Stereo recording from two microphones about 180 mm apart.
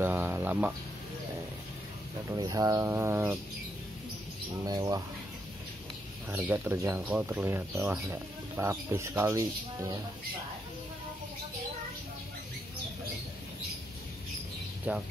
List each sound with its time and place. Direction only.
0.0 s a sound: 10° right (ahead or behind)
2.2 s speech: 20° right (ahead or behind)
4.6 s speech: 20° right (ahead or behind)
6.3 s speech: 10° right (ahead or behind)
14.9 s speech: 10° right (ahead or behind)